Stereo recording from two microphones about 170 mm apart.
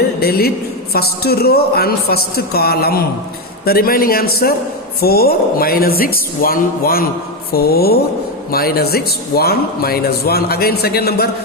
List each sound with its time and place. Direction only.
0.2 s a woman's voice: 65° left (ahead or behind)